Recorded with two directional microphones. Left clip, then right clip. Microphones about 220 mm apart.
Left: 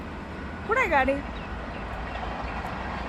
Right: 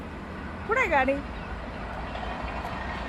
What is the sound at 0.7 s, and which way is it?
Speech, centre (ahead or behind).